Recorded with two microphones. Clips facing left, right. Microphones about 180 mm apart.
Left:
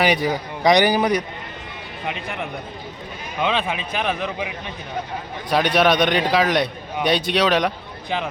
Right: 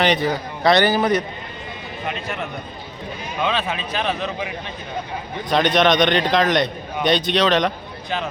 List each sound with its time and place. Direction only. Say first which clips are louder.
0.0 s a man's voice: even; 10° left (ahead or behind)